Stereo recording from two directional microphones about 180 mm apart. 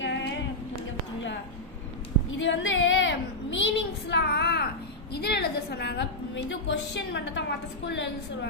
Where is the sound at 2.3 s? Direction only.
90° left; by 4.6 s 65° left (ahead or behind).